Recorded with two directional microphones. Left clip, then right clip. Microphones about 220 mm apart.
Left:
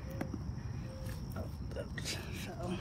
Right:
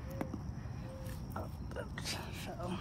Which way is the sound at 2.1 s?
15° right (ahead or behind).